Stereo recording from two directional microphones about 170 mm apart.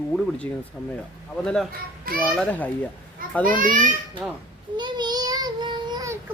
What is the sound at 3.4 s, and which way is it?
Speech, 50° right (ahead or behind).